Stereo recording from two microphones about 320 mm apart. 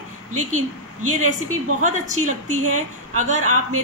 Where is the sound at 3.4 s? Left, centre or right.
Right.